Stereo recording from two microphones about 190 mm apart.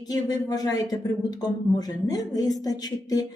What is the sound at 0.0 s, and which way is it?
Speech, 20° left (ahead or behind).